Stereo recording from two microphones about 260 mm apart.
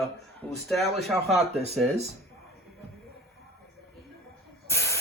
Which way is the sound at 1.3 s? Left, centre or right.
Right.